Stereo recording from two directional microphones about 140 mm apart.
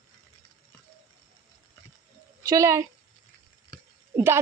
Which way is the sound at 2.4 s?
25° right (ahead or behind).